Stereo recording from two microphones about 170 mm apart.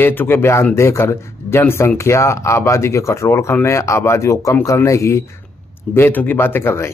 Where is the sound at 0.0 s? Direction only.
10° left (ahead or behind).